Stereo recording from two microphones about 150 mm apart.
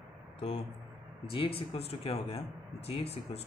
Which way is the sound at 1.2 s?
35° left (ahead or behind).